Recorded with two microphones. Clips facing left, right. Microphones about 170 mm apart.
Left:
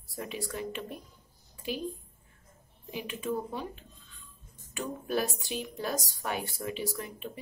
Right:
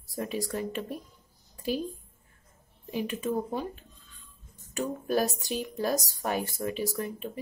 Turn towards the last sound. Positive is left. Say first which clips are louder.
# right 4 dB
turn(degrees=-40)  # may be behind; listen again after turning